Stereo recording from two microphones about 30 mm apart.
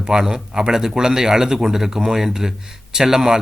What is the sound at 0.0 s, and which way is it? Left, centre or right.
Speech, centre.